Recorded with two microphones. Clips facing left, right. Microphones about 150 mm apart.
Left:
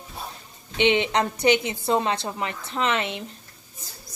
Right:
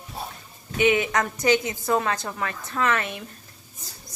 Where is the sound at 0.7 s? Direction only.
25° left (ahead or behind).